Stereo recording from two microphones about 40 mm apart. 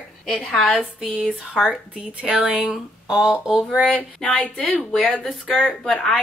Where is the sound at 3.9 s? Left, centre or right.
Left.